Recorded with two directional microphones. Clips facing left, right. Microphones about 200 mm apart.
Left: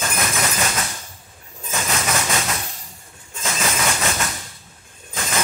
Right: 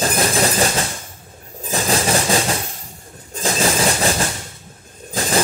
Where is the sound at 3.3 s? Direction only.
35° right (ahead or behind).